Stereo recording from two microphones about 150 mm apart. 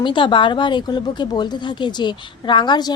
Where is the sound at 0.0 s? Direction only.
30° left (ahead or behind).